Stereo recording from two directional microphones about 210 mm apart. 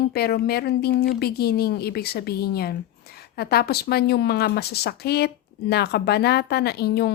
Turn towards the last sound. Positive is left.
turn(degrees=50)  # may be behind; listen again after turning